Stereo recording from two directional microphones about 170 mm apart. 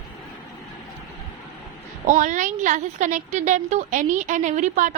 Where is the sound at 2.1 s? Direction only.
50° right (ahead or behind).